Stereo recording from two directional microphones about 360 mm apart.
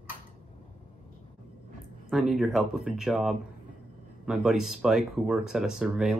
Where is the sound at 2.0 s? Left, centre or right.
Centre.